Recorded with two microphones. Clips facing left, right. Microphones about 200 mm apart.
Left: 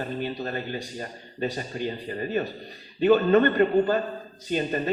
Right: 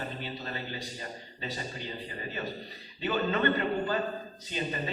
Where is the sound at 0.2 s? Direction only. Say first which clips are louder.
Left 8 dB; 50° left (ahead or behind).